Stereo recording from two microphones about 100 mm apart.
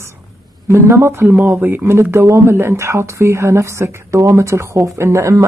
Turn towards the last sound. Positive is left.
turn(degrees=-30)  # may be behind; listen again after turning